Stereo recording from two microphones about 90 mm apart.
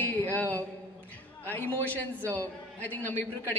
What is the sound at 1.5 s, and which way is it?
A man's voice, 20° left (ahead or behind).